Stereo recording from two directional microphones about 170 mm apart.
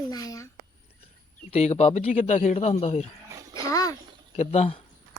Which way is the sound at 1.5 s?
40° left (ahead or behind).